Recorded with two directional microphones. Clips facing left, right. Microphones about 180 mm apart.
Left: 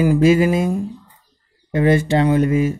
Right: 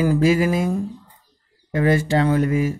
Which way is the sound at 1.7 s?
20° left (ahead or behind).